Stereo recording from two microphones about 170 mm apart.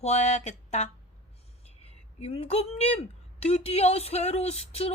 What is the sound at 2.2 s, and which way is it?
A woman's voice, 35° left (ahead or behind).